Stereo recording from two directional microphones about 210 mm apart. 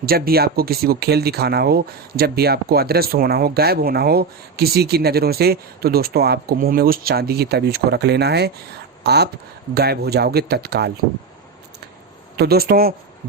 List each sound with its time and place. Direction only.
0.0 s speech: 45° right (ahead or behind)
12.4 s speech: 50° right (ahead or behind)